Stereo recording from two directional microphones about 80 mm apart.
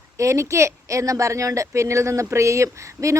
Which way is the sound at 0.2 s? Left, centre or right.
Right.